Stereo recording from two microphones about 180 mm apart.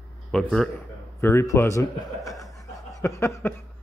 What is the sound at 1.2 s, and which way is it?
Speech, 15° left (ahead or behind).